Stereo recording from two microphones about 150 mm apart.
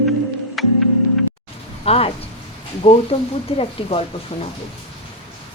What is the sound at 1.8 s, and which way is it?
Speech, 40° left (ahead or behind).